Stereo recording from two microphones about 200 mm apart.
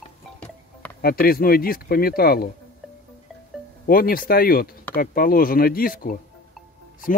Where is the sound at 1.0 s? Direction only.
50° left (ahead or behind).